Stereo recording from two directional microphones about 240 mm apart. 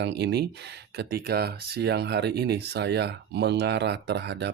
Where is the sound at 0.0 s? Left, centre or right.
Right.